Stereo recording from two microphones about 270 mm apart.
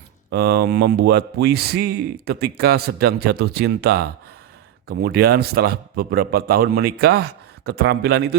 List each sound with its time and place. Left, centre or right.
0.3 s a man's voice: right